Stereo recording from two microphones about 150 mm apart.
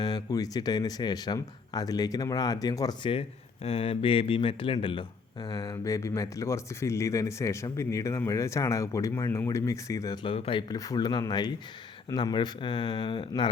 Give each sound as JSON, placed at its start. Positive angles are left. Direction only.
{"t": 0.0, "sound": "speech", "side_deg": 25}
{"t": 3.1, "sound": "speech", "side_deg": 40}
{"t": 10.2, "sound": "speech", "side_deg": 40}
{"t": 10.7, "sound": "speech", "side_deg": 25}